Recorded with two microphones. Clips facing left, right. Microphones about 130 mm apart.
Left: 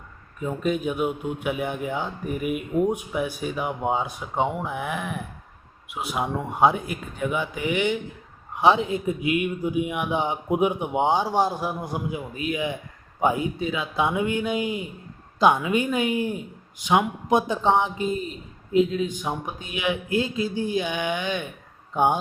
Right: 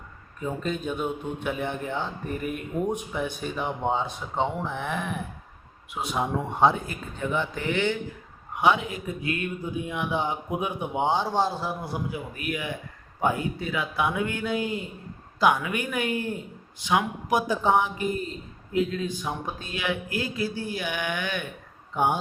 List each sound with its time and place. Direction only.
0.3 s speech: 5° left (ahead or behind)
8.5 s a man's voice: 30° left (ahead or behind)